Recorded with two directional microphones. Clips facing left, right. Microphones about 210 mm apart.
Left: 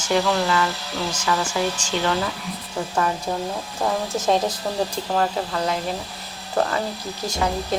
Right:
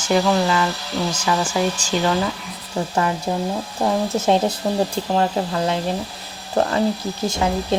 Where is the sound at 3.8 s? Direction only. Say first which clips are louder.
Right 4 dB; 25° right (ahead or behind).